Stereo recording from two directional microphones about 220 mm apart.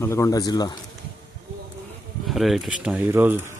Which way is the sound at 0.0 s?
10° left (ahead or behind).